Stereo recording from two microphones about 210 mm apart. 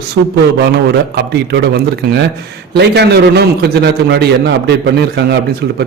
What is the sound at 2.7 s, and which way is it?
A man's voice, 50° right (ahead or behind).